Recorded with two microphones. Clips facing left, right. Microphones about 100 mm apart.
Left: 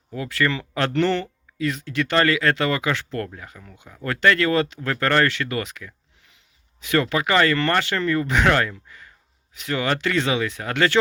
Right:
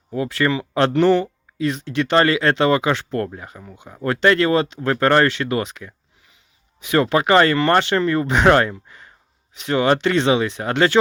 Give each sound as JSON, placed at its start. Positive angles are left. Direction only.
{"t": 0.1, "sound": "speech", "side_deg": -25}
{"t": 8.7, "sound": "a sound", "side_deg": -25}
{"t": 9.6, "sound": "speech", "side_deg": -25}